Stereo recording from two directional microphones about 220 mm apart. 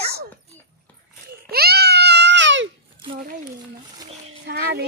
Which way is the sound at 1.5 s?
45° right (ahead or behind).